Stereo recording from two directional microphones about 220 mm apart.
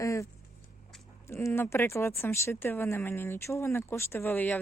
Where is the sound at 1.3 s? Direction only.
10° left (ahead or behind).